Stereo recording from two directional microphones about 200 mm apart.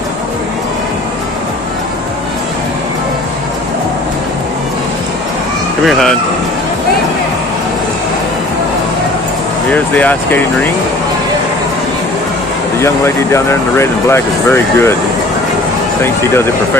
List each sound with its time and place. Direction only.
5.9 s speech: centre (ahead or behind)
9.7 s speech: 10° left (ahead or behind)
12.8 s speech: 15° left (ahead or behind)
16.0 s speech: 10° left (ahead or behind)